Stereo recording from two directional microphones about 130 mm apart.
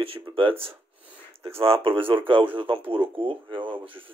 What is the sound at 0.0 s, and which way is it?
Speech, 45° right (ahead or behind).